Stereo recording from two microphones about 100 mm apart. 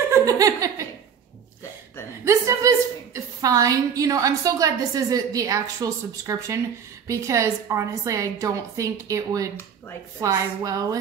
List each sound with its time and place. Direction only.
0.1 s laughter: 35° right (ahead or behind)
2.2 s a woman's voice: 30° right (ahead or behind)